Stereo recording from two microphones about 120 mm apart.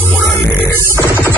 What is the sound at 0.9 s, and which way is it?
Music, 20° left (ahead or behind).